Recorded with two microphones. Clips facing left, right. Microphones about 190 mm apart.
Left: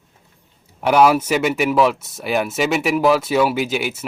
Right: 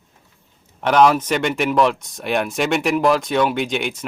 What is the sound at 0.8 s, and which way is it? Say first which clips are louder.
Speech: left 1 dB; 5° left (ahead or behind).